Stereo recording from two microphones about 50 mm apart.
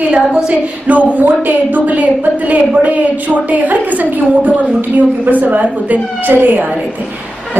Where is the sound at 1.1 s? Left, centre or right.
Right.